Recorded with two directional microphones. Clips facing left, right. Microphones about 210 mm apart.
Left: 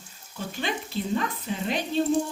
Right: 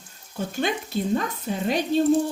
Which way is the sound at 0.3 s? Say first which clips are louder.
Right 5 dB; 45° right (ahead or behind).